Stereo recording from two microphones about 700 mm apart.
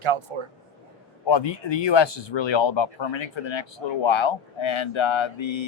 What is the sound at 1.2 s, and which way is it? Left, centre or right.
Speech, left.